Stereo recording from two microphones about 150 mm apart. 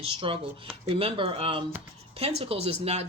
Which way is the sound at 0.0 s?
35° right (ahead or behind).